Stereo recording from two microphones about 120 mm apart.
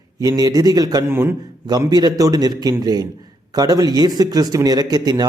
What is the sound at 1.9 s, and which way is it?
A man's voice, 35° right (ahead or behind).